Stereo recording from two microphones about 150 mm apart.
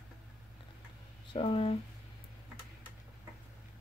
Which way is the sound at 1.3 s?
35° left (ahead or behind).